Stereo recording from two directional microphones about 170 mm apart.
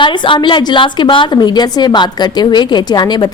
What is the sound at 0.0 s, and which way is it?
A woman's voice, 30° left (ahead or behind).